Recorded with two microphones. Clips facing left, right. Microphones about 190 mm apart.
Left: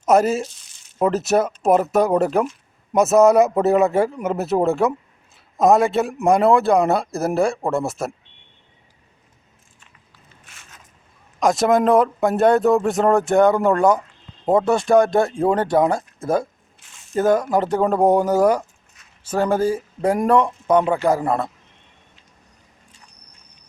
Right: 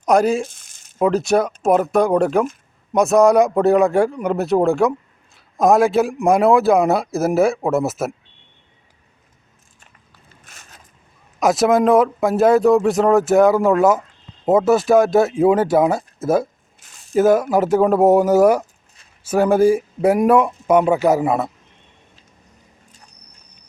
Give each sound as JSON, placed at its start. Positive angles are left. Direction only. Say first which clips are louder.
{"t": 0.0, "sound": "speech", "louder": "right 1 dB", "side_deg": 5}
{"t": 0.4, "sound": "a sound", "louder": "right 1 dB", "side_deg": -50}
{"t": 0.9, "sound": "speech", "louder": "right 2 dB", "side_deg": 0}
{"t": 10.4, "sound": "boat", "louder": "right 2 dB", "side_deg": -40}
{"t": 11.3, "sound": "speech", "louder": "right 2 dB", "side_deg": -5}
{"t": 16.8, "sound": "a sound", "louder": "right 5 dB", "side_deg": -35}
{"t": 17.2, "sound": "speech", "louder": "right 3 dB", "side_deg": -5}